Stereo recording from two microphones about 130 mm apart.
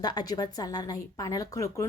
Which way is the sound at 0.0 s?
30° left (ahead or behind).